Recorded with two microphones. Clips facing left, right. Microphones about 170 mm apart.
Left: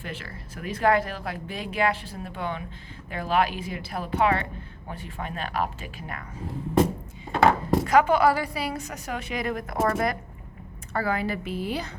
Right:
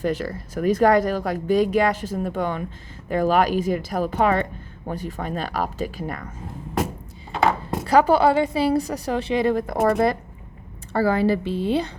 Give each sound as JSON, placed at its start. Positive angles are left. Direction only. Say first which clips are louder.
{"t": 0.0, "sound": "speech", "louder": "right 13 dB", "side_deg": -40}
{"t": 7.9, "sound": "a woman's voice", "louder": "right 4 dB", "side_deg": -35}